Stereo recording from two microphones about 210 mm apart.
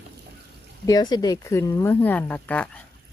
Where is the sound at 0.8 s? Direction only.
20° left (ahead or behind).